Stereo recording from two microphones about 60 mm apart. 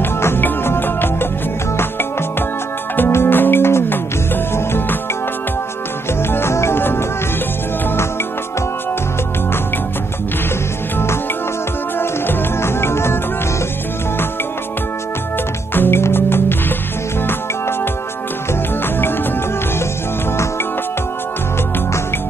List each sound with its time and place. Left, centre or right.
0.0 s music: left
3.1 s music: left
6.3 s music: left
12.0 s music: left
15.7 s music: left
18.5 s music: left